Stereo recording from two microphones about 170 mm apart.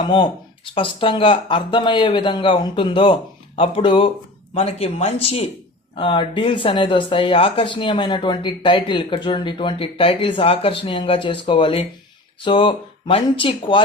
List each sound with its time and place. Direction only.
0.0 s speech: 25° left (ahead or behind)